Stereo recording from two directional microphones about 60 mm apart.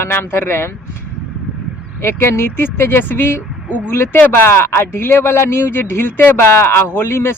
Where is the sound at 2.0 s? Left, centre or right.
Left.